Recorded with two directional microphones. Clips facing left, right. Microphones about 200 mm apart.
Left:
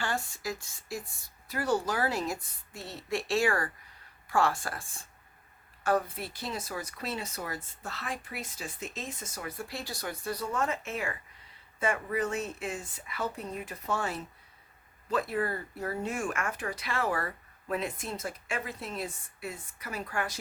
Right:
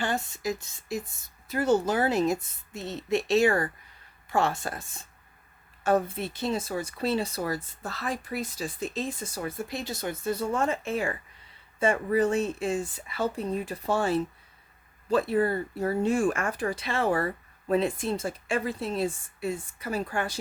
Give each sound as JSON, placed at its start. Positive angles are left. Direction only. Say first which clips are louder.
{"t": 0.0, "sound": "speech", "louder": "right 5 dB", "side_deg": -20}